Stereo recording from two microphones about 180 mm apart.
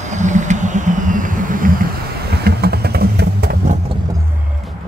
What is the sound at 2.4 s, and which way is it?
Vehicle, 60° right (ahead or behind).